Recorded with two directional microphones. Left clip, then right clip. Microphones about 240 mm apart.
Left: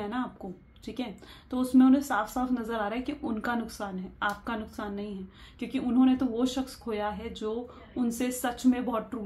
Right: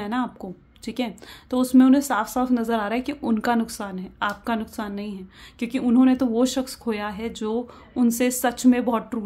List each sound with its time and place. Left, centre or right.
0.0 s a woman's voice: right